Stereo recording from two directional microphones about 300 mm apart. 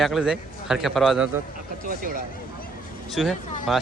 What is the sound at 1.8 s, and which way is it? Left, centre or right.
Speech, right.